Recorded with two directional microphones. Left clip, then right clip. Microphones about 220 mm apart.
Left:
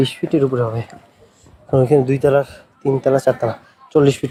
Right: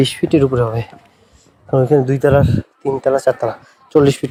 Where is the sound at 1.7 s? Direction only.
20° right (ahead or behind).